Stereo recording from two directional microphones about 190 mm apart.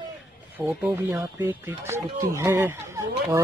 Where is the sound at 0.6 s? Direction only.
10° right (ahead or behind).